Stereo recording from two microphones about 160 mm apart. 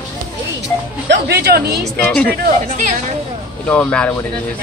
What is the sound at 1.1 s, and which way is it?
Speech, 90° right.